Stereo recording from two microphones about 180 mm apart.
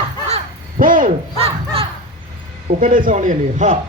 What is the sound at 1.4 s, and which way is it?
Crow, 30° right (ahead or behind).